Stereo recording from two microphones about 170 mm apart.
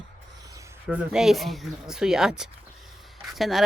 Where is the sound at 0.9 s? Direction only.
5° right (ahead or behind).